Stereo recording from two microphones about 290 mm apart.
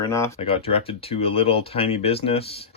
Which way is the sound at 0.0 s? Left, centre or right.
Centre.